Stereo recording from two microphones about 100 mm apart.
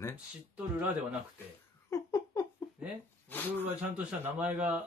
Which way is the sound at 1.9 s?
30° left (ahead or behind).